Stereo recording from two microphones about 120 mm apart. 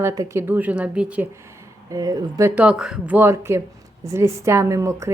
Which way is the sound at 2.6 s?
5° right (ahead or behind).